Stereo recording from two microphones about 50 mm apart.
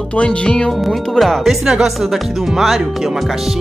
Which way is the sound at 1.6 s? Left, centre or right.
Centre.